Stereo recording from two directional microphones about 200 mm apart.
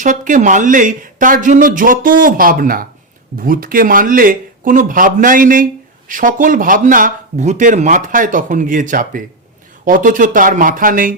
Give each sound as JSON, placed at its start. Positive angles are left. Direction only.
{"t": 0.0, "sound": "speech", "side_deg": -40}